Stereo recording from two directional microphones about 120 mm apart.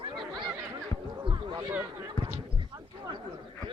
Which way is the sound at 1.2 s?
40° right (ahead or behind).